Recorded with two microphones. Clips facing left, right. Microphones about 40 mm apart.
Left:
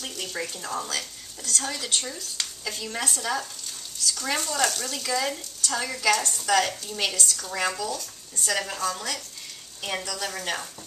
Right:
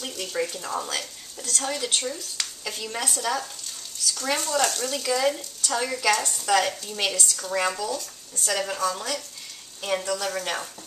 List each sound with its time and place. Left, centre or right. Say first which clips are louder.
0.0 s a woman's voice: right 4 dB; centre
6.7 s speech: right 1 dB; centre
9.8 s a woman's voice: right 4 dB; centre